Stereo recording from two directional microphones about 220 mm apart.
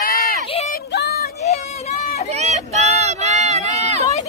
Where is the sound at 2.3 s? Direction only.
30° right (ahead or behind).